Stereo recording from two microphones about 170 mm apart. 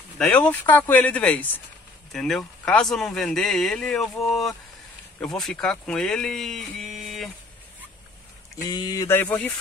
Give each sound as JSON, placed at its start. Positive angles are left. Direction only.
{"t": 0.2, "sound": "speech", "side_deg": 10}
{"t": 8.6, "sound": "speech", "side_deg": 25}